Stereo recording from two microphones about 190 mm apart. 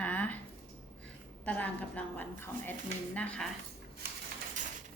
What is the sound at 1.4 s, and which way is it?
A woman's voice, 5° left (ahead or behind).